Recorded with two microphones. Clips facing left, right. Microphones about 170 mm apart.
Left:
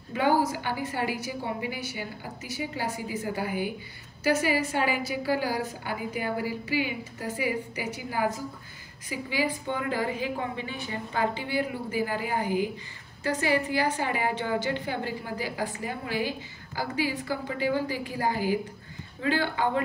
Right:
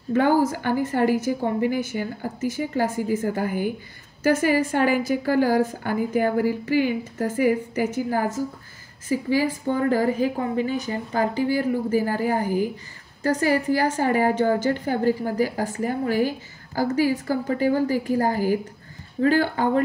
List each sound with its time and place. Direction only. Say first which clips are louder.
0.1 s a woman's voice: right 5 dB; 45° right (ahead or behind)